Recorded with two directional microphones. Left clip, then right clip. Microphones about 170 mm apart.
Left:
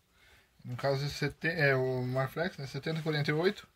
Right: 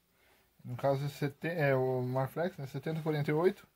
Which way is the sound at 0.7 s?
35° right (ahead or behind).